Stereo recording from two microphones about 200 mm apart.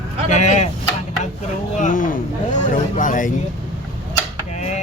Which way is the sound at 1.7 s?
40° left (ahead or behind).